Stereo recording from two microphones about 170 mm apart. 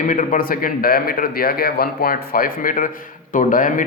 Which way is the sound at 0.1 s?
50° left (ahead or behind).